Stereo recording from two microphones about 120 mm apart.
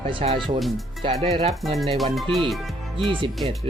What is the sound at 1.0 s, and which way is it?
Speech, 55° right (ahead or behind).